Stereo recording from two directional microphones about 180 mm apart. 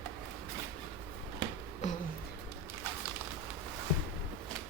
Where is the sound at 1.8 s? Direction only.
40° left (ahead or behind).